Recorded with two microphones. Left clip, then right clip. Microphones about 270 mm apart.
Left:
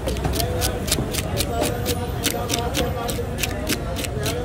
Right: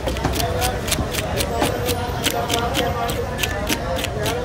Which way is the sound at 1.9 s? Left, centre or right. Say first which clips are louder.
Right 3 dB; centre.